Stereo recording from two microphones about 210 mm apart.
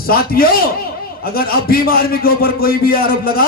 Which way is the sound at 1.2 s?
45° left (ahead or behind).